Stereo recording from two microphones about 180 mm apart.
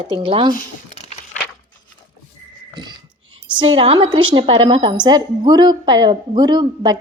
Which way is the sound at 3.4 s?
30° right (ahead or behind).